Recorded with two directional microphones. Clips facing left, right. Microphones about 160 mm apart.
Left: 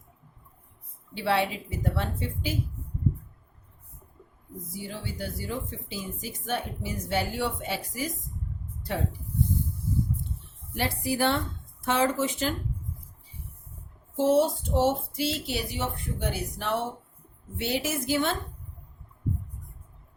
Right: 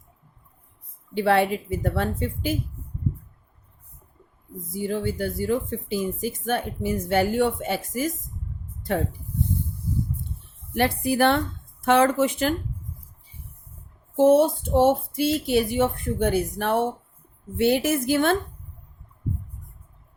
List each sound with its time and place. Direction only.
1.1 s speech: 55° right (ahead or behind)
4.7 s speech: 50° right (ahead or behind)
10.8 s a woman's voice: 60° right (ahead or behind)
14.2 s a woman's voice: 55° right (ahead or behind)